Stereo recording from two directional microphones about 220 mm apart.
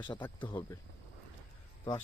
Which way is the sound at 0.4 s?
20° left (ahead or behind).